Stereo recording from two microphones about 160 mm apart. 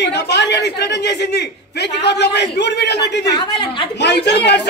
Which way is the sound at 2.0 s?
90° left.